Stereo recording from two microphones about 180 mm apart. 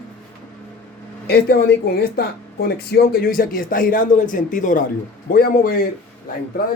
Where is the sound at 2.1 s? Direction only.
60° left (ahead or behind).